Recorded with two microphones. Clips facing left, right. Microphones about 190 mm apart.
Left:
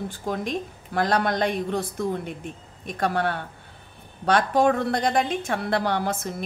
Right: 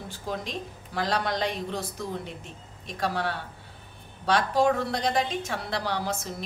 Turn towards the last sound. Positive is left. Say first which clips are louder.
# left 5 dB
turn(degrees=55)  # may be behind; listen again after turning